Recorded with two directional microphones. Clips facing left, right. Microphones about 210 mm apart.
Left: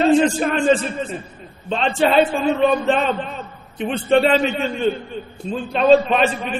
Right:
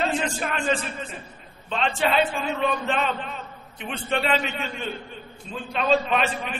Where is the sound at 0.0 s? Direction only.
35° left (ahead or behind).